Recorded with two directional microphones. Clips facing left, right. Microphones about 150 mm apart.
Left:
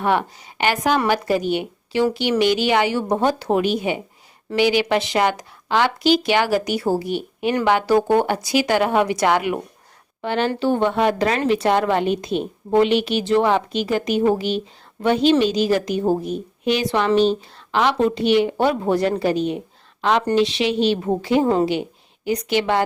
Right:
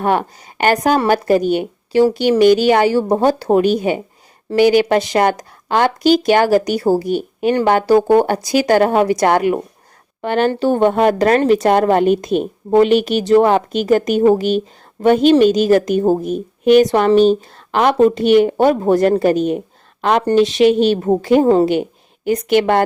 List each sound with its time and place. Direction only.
0.0 s a woman's voice: 45° right (ahead or behind)